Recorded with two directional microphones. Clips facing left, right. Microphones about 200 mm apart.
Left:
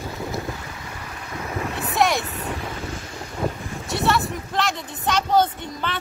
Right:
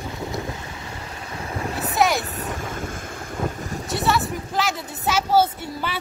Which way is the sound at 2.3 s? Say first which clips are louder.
Even; 45° right (ahead or behind).